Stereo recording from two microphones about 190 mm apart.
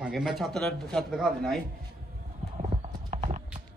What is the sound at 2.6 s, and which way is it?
Clip-clop, 30° right (ahead or behind).